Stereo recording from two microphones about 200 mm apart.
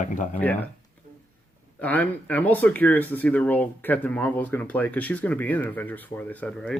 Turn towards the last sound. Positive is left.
turn(degrees=5)  # may be behind; listen again after turning